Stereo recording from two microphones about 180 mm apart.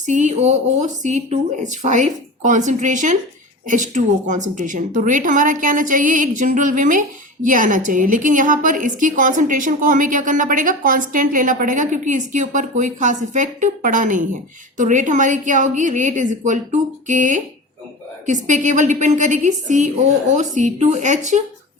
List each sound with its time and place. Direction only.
0.0 s a woman's voice: 45° right (ahead or behind)